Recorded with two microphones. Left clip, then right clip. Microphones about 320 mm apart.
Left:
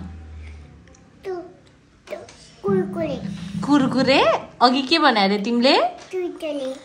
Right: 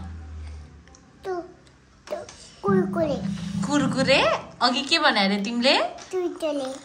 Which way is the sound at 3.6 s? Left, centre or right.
Centre.